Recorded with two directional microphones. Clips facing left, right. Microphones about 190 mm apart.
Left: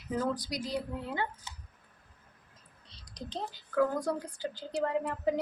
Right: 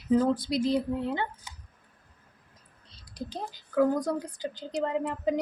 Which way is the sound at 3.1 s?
10° right (ahead or behind).